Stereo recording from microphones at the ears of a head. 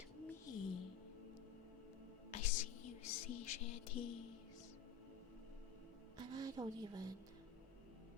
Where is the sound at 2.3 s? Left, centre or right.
Left.